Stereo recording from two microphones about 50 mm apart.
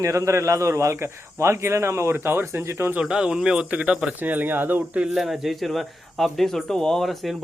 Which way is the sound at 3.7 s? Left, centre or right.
Right.